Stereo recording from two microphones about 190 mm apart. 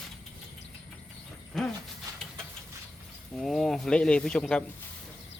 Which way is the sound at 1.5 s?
Centre (ahead or behind).